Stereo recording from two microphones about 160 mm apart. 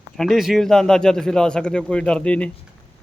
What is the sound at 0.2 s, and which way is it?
Speech, centre (ahead or behind).